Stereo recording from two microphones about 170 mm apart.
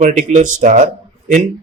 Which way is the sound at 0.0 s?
45° right (ahead or behind).